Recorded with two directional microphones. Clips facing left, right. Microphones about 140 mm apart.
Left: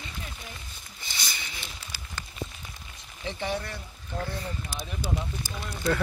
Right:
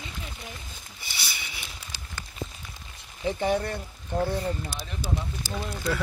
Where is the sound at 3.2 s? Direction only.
45° right (ahead or behind).